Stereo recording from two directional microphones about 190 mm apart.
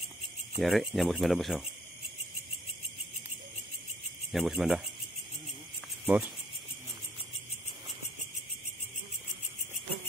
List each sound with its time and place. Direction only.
0.6 s speech: centre (ahead or behind)
4.3 s speech: centre (ahead or behind)
6.0 s speech: 5° right (ahead or behind)